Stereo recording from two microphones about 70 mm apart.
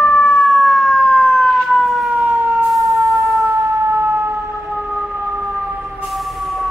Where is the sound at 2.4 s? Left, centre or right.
Right.